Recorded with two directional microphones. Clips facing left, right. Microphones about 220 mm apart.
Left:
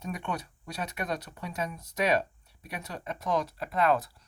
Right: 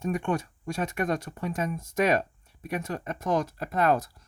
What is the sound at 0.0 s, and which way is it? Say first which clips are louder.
Speech: right 7 dB; 50° right (ahead or behind).